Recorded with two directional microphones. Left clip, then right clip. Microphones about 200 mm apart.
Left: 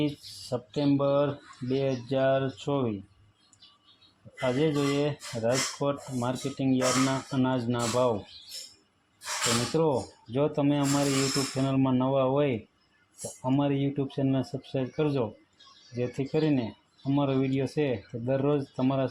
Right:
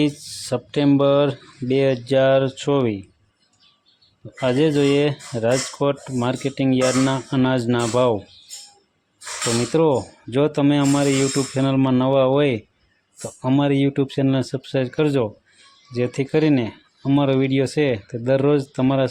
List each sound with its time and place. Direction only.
0.0 s speech: 35° right (ahead or behind)
4.4 s speech: 35° right (ahead or behind)
9.7 s speech: 35° right (ahead or behind)